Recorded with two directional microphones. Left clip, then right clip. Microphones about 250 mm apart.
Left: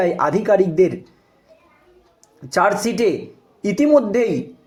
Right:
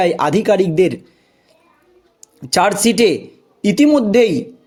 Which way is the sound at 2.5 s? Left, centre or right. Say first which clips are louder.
Right 3 dB; right.